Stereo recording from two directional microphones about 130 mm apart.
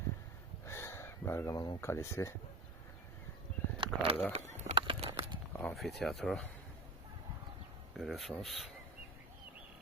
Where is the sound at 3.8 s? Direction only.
45° right (ahead or behind).